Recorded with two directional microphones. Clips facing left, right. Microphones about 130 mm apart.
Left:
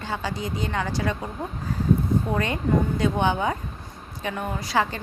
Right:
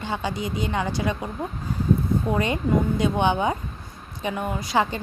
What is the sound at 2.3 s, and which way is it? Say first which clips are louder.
A woman's voice: right 2 dB; 15° right (ahead or behind).